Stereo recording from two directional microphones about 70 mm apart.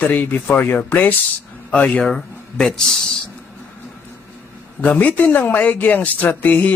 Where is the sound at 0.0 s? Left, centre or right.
Left.